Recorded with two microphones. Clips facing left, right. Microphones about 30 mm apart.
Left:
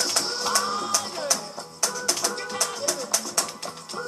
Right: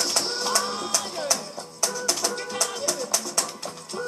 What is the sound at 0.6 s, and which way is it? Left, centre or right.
Music, centre.